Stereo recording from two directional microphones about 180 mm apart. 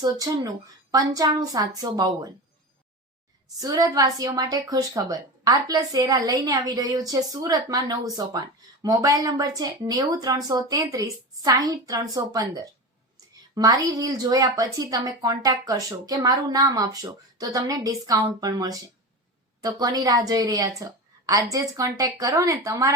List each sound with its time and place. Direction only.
0.0 s a woman's voice: 20° right (ahead or behind)
3.6 s a woman's voice: 20° right (ahead or behind)